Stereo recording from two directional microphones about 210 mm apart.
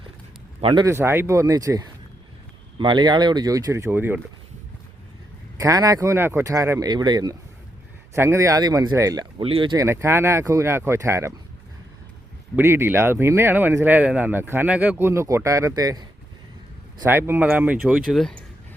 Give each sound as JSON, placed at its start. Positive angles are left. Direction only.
{"t": 0.6, "sound": "speech", "side_deg": -20}
{"t": 5.5, "sound": "speech", "side_deg": -15}
{"t": 12.5, "sound": "speech", "side_deg": -10}